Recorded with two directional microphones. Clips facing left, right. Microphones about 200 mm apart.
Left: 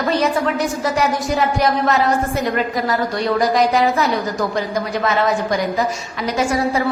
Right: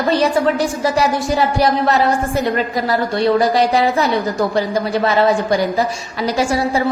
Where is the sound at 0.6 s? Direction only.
30° right (ahead or behind).